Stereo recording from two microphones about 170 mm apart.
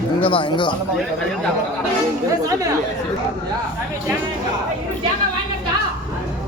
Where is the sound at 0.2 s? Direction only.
30° left (ahead or behind).